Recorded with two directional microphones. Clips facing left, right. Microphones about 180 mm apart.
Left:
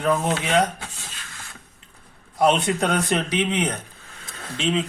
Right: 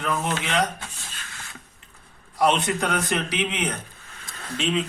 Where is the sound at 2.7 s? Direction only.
30° left (ahead or behind).